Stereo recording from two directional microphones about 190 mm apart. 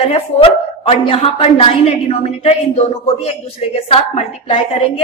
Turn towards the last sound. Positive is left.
turn(degrees=30)  # may be behind; listen again after turning